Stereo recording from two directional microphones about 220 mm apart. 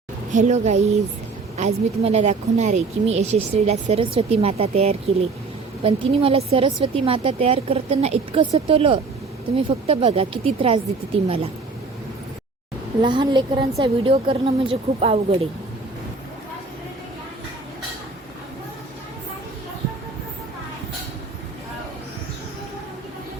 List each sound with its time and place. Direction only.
0.3 s a woman's voice: 30° right (ahead or behind)
13.0 s a woman's voice: 20° right (ahead or behind)